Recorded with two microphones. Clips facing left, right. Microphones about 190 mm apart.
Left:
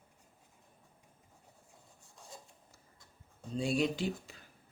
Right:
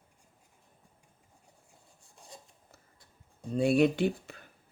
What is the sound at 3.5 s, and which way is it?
Speech, 60° right (ahead or behind).